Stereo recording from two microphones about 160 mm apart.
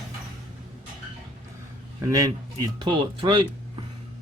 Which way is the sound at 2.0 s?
20° right (ahead or behind).